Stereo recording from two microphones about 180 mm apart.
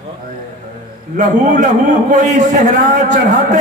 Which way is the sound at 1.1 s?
45° right (ahead or behind).